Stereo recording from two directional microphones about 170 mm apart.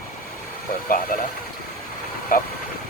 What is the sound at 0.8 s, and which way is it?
Speech, 55° left (ahead or behind).